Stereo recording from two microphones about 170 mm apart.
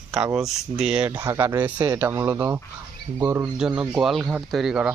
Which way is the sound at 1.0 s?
15° right (ahead or behind).